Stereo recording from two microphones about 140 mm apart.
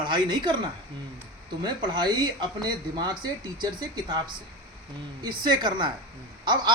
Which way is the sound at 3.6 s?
30° right (ahead or behind).